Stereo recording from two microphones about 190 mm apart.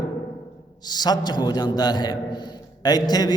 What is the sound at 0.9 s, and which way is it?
A man's voice, 20° left (ahead or behind).